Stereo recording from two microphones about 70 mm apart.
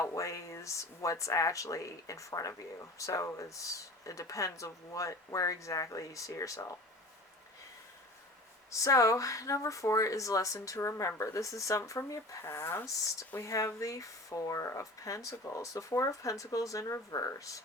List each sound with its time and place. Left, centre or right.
0.0 s speech: left
8.7 s speech: left